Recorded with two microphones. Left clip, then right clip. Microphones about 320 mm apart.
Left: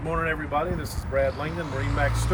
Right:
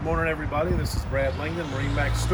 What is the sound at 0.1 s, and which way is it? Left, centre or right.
Speech, centre.